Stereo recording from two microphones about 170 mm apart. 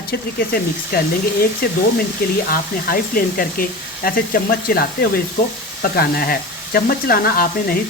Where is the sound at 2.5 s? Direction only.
60° left (ahead or behind).